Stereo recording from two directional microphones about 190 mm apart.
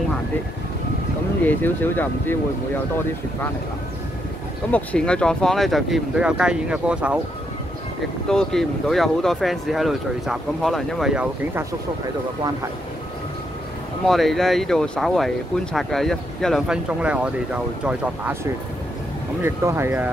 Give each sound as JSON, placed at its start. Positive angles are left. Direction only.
{"t": 1.4, "sound": "speech", "side_deg": 10}
{"t": 4.6, "sound": "speech", "side_deg": 5}
{"t": 8.3, "sound": "speech", "side_deg": 5}
{"t": 14.0, "sound": "speech", "side_deg": 0}